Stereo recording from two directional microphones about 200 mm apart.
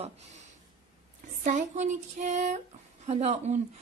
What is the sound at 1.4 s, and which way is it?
A woman's voice, 35° right (ahead or behind).